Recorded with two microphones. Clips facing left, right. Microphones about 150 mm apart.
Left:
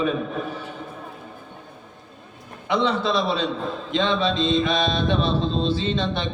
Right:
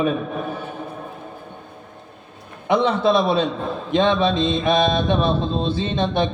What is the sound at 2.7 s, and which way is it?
Mantra, 55° right (ahead or behind).